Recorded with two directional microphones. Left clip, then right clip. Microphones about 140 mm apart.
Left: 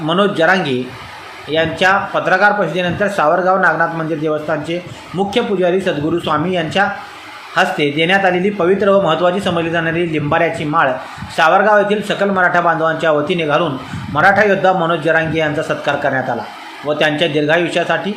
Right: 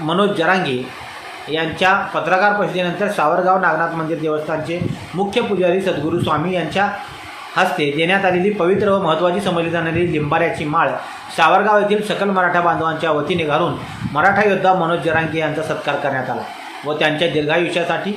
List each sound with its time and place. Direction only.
0.1 s speech: 20° left (ahead or behind)